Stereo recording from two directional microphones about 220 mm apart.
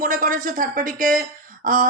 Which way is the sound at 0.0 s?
40° right (ahead or behind).